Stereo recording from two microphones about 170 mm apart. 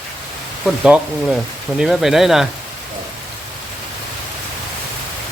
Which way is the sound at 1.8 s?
Centre (ahead or behind).